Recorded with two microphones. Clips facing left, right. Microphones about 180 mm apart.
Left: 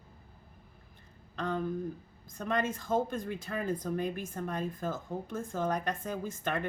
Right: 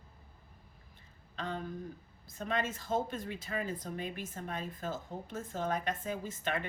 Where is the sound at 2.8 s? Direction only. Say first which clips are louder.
Left 3 dB; 50° left (ahead or behind).